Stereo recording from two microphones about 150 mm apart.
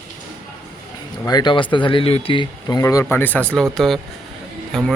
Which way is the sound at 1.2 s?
30° left (ahead or behind).